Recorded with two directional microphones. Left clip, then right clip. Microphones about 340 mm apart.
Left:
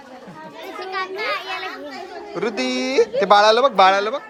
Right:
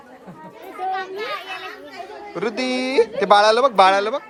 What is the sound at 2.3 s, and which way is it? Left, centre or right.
Speech, centre.